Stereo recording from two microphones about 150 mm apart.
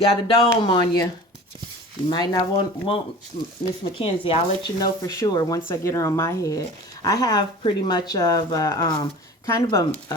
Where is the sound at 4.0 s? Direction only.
40° left (ahead or behind).